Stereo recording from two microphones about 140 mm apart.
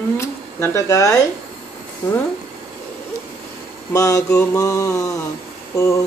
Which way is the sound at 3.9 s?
25° left (ahead or behind).